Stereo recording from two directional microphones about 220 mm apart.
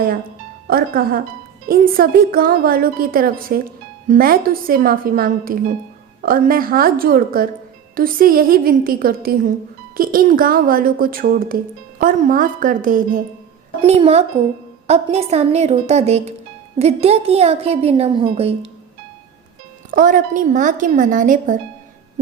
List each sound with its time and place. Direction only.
0.7 s a woman's voice: 40° right (ahead or behind); by 18.5 s 25° right (ahead or behind)
19.9 s a woman's voice: 40° right (ahead or behind)